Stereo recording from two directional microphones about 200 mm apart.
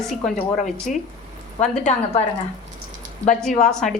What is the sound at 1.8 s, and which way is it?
Speech, 35° left (ahead or behind).